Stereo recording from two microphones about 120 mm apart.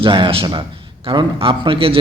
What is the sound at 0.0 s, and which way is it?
A man's voice, 45° right (ahead or behind).